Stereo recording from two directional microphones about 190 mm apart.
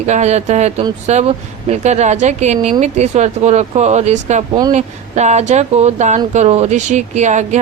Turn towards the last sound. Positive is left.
turn(degrees=-40)  # may be behind; listen again after turning